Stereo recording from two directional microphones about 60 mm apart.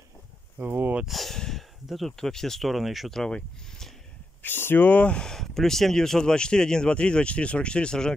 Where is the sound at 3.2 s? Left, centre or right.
Centre.